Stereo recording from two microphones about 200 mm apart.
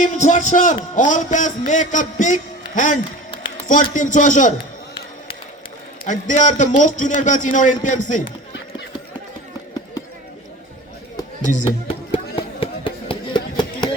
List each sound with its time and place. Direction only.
0.0 s a man's voice: 35° left (ahead or behind)
6.1 s a man's voice: 40° left (ahead or behind)
11.2 s a sound: 25° left (ahead or behind)